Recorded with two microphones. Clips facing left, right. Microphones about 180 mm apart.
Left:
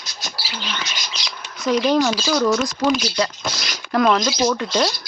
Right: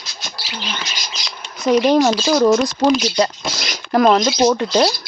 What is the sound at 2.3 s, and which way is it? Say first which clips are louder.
Speech: right 6 dB; 30° right (ahead or behind).